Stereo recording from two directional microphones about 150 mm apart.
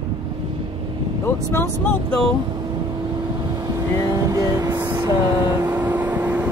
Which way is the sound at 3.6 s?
25° right (ahead or behind).